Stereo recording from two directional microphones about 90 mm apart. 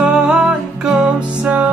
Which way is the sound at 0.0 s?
10° right (ahead or behind).